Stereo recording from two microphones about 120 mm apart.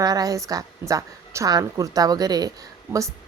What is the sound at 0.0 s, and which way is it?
A woman's voice, 30° right (ahead or behind).